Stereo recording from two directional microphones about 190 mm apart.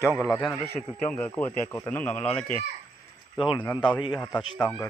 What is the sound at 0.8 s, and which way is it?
Speech, centre (ahead or behind).